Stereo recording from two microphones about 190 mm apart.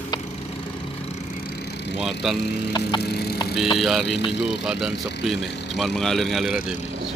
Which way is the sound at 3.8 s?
Centre (ahead or behind).